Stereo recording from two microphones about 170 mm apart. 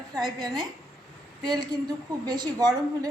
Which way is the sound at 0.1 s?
20° right (ahead or behind).